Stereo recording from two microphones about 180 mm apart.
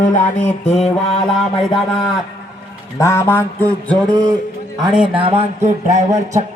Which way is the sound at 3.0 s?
15° left (ahead or behind).